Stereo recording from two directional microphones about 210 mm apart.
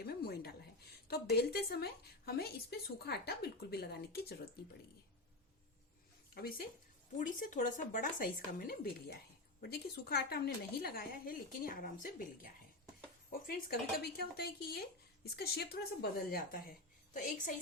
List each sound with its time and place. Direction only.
0.0 s a woman's voice: 45° left (ahead or behind)
6.3 s speech: 45° left (ahead or behind)
13.5 s speech: 45° left (ahead or behind)